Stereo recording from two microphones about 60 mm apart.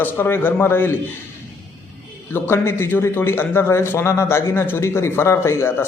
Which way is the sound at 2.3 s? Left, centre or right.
Left.